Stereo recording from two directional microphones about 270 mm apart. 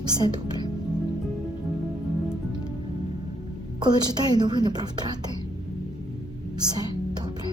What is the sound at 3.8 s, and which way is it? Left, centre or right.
A woman's voice, centre.